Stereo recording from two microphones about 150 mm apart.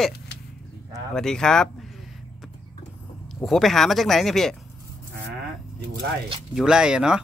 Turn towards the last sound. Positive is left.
turn(degrees=-5)  # may be behind; listen again after turning